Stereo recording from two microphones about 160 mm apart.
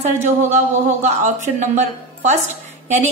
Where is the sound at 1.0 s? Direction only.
50° right (ahead or behind).